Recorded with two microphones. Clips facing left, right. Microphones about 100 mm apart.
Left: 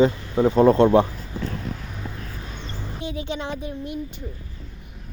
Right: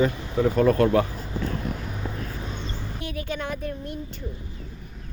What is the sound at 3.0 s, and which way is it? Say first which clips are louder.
Speech: left 2 dB; 20° left (ahead or behind).